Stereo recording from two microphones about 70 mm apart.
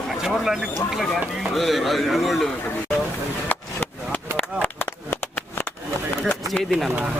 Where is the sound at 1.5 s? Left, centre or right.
Centre.